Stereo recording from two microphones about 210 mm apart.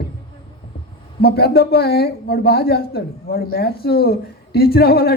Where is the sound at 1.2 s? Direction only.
50° left (ahead or behind).